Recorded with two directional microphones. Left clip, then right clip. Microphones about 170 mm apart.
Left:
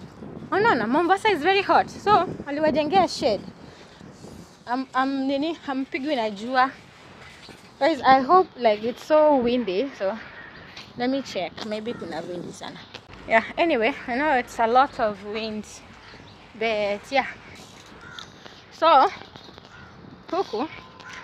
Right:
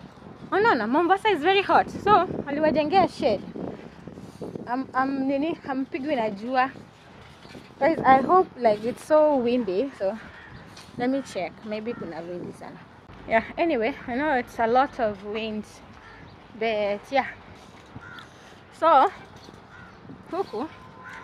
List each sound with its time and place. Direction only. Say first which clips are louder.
0.5 s a woman's voice: left 1 dB; 10° right (ahead or behind); by 2.5 s 30° right (ahead or behind)
2.5 s speech: left 1 dB; 10° right (ahead or behind)
4.6 s a woman's voice: left 2 dB; 5° right (ahead or behind)
7.8 s a woman's voice: left 1 dB; centre (ahead or behind); by 15.5 s 20° right (ahead or behind)
16.5 s a woman's voice: left 1 dB; 10° right (ahead or behind)
18.8 s speech: left 1 dB; centre (ahead or behind)
20.3 s quack: left 3 dB; 15° right (ahead or behind)